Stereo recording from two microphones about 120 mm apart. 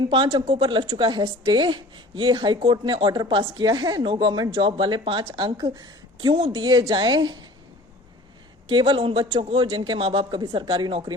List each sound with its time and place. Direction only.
0.1 s a woman's voice: 40° right (ahead or behind)
6.3 s speech: 55° right (ahead or behind)
6.6 s speech: 40° right (ahead or behind)
8.6 s a woman's voice: 45° right (ahead or behind)